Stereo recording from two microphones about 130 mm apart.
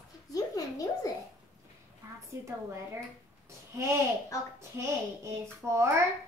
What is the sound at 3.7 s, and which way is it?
Child singing, 20° right (ahead or behind).